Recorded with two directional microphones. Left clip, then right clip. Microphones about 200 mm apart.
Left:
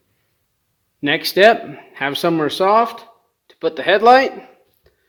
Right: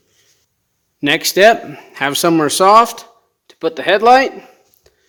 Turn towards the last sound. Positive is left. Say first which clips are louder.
# right 1 dB
turn(degrees=-15)  # may be behind; listen again after turning